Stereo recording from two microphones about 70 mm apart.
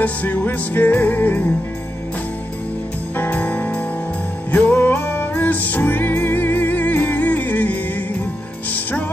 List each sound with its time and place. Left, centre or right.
0.0 s music: left
3.2 s music: left